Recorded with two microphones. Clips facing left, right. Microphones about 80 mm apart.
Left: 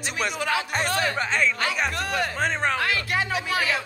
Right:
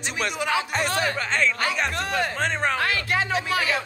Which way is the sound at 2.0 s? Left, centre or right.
Right.